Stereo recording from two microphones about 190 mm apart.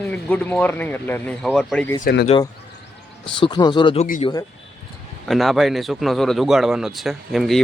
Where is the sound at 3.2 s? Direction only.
25° left (ahead or behind).